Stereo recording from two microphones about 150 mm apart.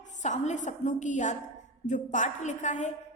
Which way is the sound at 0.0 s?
55° left (ahead or behind).